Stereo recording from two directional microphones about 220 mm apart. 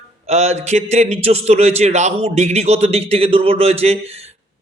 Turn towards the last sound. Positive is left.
turn(degrees=-30)  # may be behind; listen again after turning